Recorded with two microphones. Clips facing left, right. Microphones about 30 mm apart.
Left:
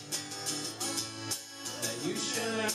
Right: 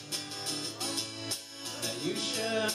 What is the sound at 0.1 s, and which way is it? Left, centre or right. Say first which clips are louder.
Music: right 1 dB; right.